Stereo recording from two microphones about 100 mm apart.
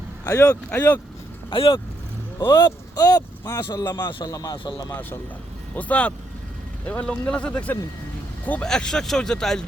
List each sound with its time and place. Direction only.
0.4 s speech: 15° left (ahead or behind)
1.5 s speech: 60° left (ahead or behind)
2.5 s a man's voice: 40° left (ahead or behind)
5.7 s speech: 15° left (ahead or behind)